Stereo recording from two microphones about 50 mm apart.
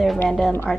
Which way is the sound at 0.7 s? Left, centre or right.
Centre.